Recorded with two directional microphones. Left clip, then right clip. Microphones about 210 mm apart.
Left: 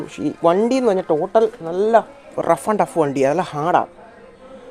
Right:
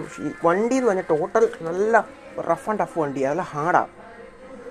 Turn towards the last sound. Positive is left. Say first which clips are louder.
# left 3 dB
turn(degrees=40)  # may be behind; listen again after turning